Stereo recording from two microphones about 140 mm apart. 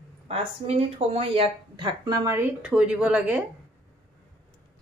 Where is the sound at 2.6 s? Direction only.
10° right (ahead or behind).